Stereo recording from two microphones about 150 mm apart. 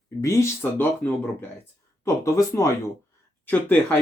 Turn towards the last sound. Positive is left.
turn(degrees=10)  # may be behind; listen again after turning